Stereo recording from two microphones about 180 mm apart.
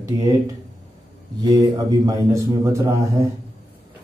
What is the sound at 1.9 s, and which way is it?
A man's voice, 20° right (ahead or behind).